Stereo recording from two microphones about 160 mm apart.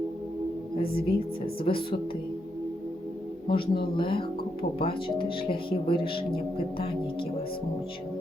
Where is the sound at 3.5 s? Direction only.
30° left (ahead or behind).